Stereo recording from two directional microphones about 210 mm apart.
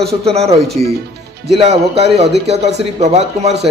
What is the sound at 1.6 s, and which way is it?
Speech, 30° right (ahead or behind).